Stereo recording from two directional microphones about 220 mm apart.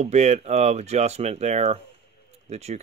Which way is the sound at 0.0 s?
30° right (ahead or behind).